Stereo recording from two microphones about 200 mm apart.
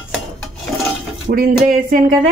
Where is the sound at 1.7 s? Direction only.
40° right (ahead or behind).